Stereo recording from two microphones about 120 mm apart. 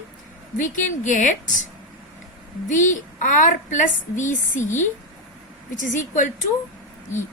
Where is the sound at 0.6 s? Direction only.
90° left.